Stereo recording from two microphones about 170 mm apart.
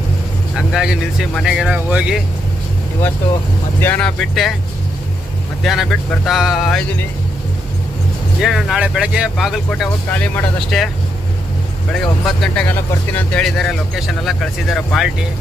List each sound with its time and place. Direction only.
0.5 s speech: 5° right (ahead or behind)
3.8 s speech: 10° left (ahead or behind)
5.6 s speech: centre (ahead or behind)
8.4 s speech: centre (ahead or behind)
10.1 s speech: 10° left (ahead or behind)
11.9 s speech: centre (ahead or behind)